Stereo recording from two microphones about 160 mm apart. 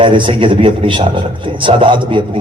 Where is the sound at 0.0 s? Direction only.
30° right (ahead or behind).